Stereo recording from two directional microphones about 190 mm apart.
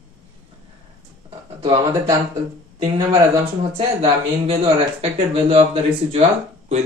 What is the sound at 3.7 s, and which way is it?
Speech, 30° right (ahead or behind).